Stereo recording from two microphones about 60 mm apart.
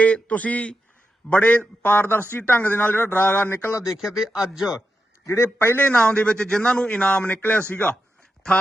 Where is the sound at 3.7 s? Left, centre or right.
Left.